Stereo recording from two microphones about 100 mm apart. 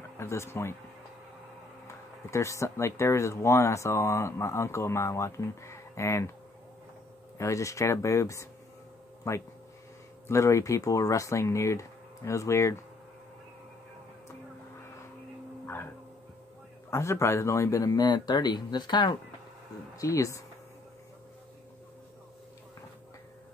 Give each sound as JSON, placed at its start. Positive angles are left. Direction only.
{"t": 0.2, "sound": "speech", "side_deg": 25}
{"t": 2.3, "sound": "speech", "side_deg": 30}
{"t": 7.3, "sound": "speech", "side_deg": 30}
{"t": 15.6, "sound": "music", "side_deg": 25}
{"t": 16.9, "sound": "speech", "side_deg": 30}
{"t": 20.0, "sound": "speech", "side_deg": 35}